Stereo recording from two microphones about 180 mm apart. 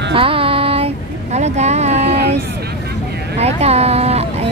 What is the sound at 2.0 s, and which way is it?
Speech, 65° right (ahead or behind).